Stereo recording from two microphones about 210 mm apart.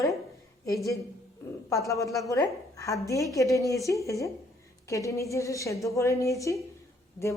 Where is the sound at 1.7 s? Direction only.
15° left (ahead or behind).